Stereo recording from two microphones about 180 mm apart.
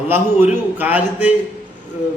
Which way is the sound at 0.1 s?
10° right (ahead or behind).